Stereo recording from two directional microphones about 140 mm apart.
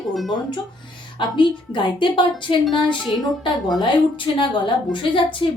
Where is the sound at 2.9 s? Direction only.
Centre (ahead or behind).